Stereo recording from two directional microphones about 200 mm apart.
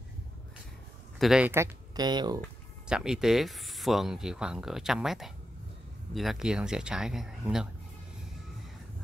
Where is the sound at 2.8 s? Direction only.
5° right (ahead or behind).